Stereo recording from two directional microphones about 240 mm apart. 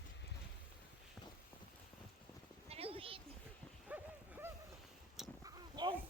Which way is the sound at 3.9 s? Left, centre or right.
Centre.